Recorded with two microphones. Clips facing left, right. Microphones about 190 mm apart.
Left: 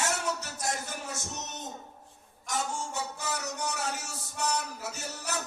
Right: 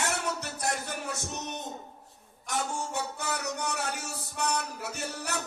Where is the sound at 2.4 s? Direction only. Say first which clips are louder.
Right 1 dB; 60° right (ahead or behind).